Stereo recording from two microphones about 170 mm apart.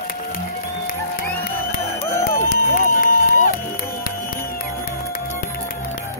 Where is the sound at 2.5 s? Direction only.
60° left (ahead or behind).